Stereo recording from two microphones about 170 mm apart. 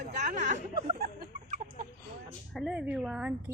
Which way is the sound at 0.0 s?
45° right (ahead or behind).